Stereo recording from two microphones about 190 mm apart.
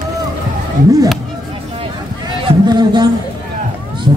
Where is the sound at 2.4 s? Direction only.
20° right (ahead or behind).